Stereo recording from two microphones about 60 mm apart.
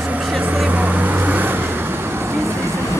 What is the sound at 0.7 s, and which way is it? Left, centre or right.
Vehicle, right.